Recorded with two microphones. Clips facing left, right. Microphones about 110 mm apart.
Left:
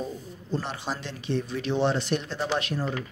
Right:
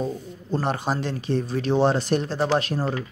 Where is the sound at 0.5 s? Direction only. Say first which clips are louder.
Right 6 dB; 50° right (ahead or behind).